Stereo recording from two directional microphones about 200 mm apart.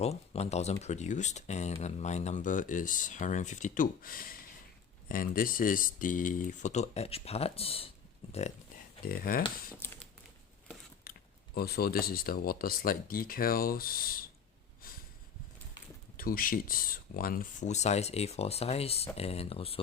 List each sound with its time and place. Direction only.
0.0 s speech: 30° left (ahead or behind)
9.0 s speech: 50° left (ahead or behind)
9.7 s crumpling: 10° left (ahead or behind)
11.5 s speech: 50° left (ahead or behind)
14.8 s a sound: 45° left (ahead or behind)
16.1 s speech: 45° left (ahead or behind); by 19.8 s 30° left (ahead or behind)